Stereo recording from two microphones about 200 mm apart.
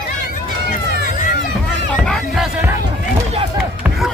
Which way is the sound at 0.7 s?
40° left (ahead or behind).